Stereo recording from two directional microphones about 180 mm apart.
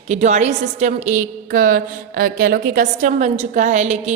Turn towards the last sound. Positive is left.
turn(degrees=-40)  # may be behind; listen again after turning